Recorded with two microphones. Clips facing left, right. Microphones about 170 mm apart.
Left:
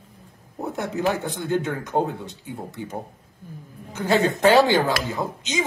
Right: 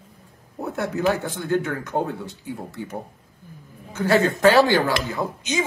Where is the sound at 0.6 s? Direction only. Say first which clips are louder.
Right 1 dB; 20° left (ahead or behind).